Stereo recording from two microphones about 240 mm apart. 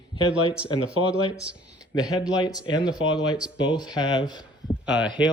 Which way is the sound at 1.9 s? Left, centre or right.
Centre.